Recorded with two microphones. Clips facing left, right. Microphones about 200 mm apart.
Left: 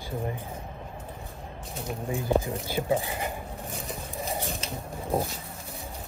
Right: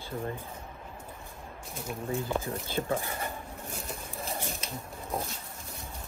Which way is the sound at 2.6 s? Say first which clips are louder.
Left 4 dB; 15° left (ahead or behind).